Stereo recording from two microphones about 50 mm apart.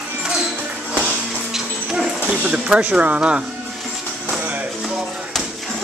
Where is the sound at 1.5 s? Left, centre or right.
Centre.